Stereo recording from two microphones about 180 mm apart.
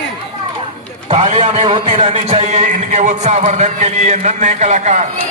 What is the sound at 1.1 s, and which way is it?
A man's voice, 40° right (ahead or behind).